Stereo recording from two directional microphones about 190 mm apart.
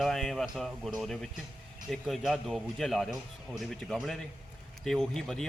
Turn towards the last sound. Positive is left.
turn(degrees=5)  # may be behind; listen again after turning